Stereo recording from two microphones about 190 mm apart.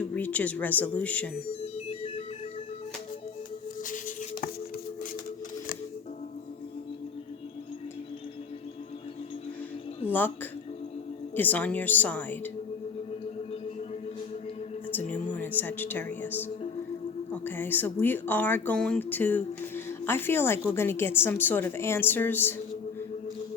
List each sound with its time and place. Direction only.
0.0 s speech: 10° left (ahead or behind)
3.8 s a sound: 45° left (ahead or behind)
10.1 s speech: 10° left (ahead or behind)
11.3 s speech: 10° left (ahead or behind)
15.4 s a woman's voice: 10° left (ahead or behind)